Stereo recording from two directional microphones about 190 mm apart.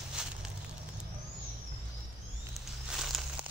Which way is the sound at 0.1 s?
5° right (ahead or behind).